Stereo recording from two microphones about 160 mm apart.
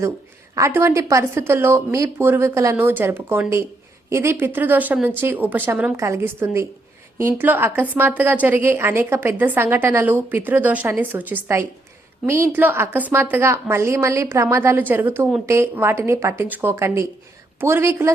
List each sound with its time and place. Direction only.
0.5 s a woman's voice: 15° right (ahead or behind)